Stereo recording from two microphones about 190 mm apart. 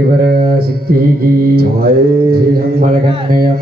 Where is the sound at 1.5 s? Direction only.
55° right (ahead or behind).